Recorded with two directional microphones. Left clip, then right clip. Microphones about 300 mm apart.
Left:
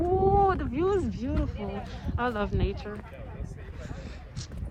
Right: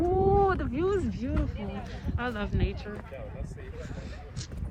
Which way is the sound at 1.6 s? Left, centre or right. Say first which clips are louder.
Left 3 dB; left.